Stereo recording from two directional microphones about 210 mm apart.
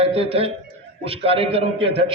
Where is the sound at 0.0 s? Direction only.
25° right (ahead or behind).